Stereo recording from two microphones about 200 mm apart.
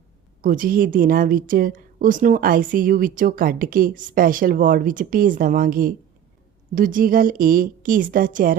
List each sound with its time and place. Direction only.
0.4 s a woman's voice: 45° right (ahead or behind)